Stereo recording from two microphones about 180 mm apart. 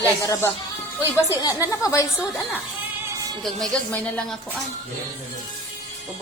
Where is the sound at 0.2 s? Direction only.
20° left (ahead or behind).